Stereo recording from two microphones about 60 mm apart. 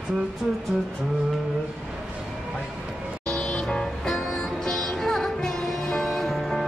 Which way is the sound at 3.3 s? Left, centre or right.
Centre.